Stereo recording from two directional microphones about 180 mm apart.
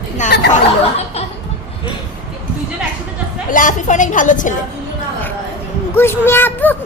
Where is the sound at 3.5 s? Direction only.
45° left (ahead or behind).